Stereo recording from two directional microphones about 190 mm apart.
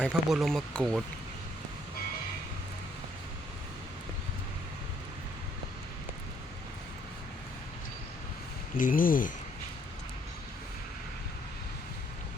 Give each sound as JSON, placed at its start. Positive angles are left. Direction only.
{"t": 0.0, "sound": "speech", "side_deg": 0}
{"t": 8.8, "sound": "speech", "side_deg": 45}